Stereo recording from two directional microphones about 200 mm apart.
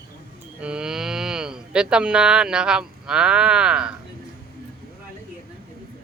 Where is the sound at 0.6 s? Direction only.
5° right (ahead or behind).